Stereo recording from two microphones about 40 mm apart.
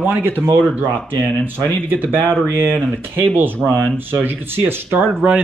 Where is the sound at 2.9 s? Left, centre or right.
Right.